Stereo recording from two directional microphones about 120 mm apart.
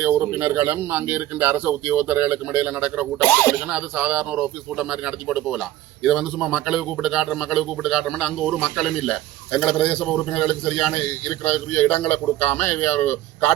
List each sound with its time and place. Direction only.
0.0 s a man's voice: 20° right (ahead or behind)
3.2 s speech: 20° left (ahead or behind)
3.7 s a man's voice: 5° right (ahead or behind); by 13.1 s 15° left (ahead or behind)